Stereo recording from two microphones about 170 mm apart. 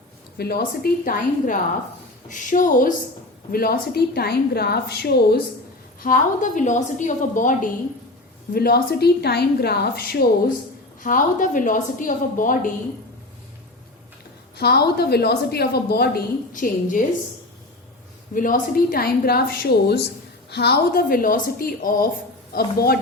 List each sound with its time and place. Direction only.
0.3 s a woman's voice: 65° left (ahead or behind)
6.0 s a woman's voice: 55° left (ahead or behind)
8.5 s a woman's voice: 65° left (ahead or behind)
11.0 s a woman's voice: 50° left (ahead or behind)
14.5 s a woman's voice: 70° left (ahead or behind); by 17.1 s 50° left (ahead or behind)
18.3 s a woman's voice: 50° left (ahead or behind)